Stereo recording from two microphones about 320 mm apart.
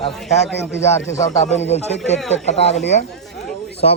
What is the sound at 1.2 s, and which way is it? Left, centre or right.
Speech, left.